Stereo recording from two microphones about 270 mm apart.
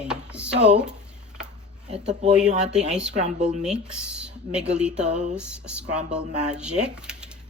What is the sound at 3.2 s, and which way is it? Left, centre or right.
Speech, right.